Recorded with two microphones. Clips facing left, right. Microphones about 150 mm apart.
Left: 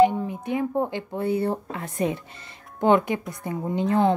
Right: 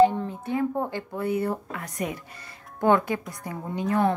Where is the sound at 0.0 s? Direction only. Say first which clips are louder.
Left 1 dB; 15° left (ahead or behind).